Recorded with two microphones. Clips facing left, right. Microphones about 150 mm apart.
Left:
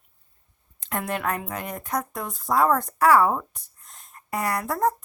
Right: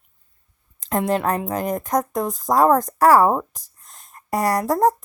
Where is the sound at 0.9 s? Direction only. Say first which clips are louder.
Right 7 dB; 35° right (ahead or behind).